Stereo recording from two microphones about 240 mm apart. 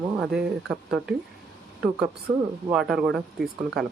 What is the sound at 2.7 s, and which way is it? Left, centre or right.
Speech, centre.